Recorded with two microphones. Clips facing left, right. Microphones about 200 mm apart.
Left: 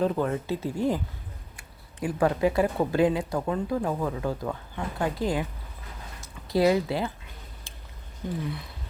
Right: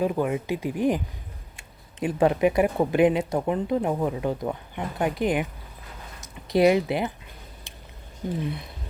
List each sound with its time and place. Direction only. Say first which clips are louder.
0.0 s speech: right 1 dB; 10° right (ahead or behind)
7.7 s a sound: right 2 dB; 20° right (ahead or behind)
8.4 s speech: right 3 dB; 20° right (ahead or behind)